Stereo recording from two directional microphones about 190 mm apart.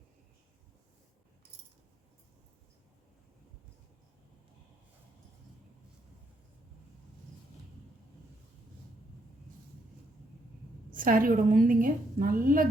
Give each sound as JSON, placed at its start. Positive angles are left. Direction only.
{"t": 10.9, "sound": "a woman's voice", "side_deg": -45}